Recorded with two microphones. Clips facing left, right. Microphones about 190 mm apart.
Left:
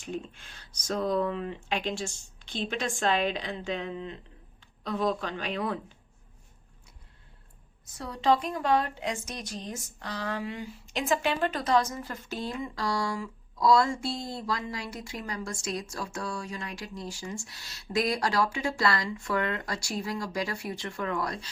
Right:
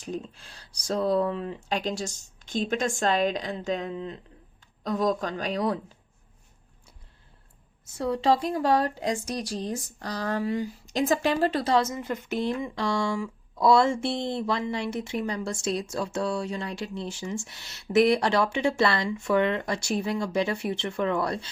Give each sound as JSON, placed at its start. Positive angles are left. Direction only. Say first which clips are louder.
{"t": 0.0, "sound": "speech", "louder": "right 2 dB", "side_deg": -35}
{"t": 7.9, "sound": "speech", "louder": "right 3 dB", "side_deg": -30}